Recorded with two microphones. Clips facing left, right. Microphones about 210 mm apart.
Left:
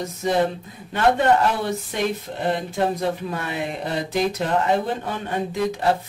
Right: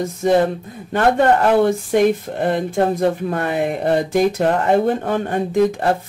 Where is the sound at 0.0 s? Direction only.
50° right (ahead or behind).